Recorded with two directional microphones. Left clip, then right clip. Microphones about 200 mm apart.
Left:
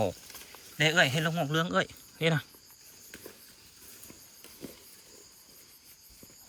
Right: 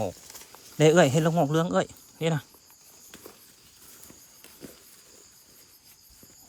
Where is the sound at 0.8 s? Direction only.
35° right (ahead or behind); by 2.5 s 15° right (ahead or behind).